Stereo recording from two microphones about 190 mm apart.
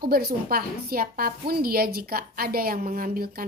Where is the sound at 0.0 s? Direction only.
55° right (ahead or behind).